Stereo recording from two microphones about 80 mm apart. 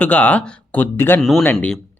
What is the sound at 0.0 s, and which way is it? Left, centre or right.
Speech, centre.